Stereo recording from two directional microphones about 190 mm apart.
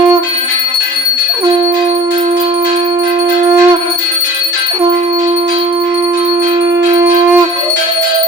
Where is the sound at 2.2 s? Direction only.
30° right (ahead or behind).